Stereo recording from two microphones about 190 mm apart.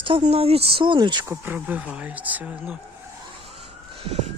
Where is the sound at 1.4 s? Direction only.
10° right (ahead or behind).